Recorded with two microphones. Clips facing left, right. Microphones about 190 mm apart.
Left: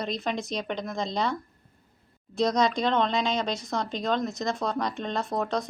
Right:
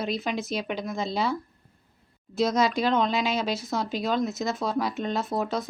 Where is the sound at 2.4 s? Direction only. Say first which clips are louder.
Right 1 dB; 5° right (ahead or behind).